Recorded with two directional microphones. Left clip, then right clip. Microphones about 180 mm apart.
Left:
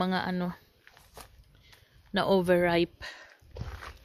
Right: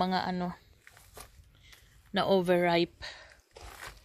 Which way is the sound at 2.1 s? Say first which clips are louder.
Left 2 dB; 25° left (ahead or behind).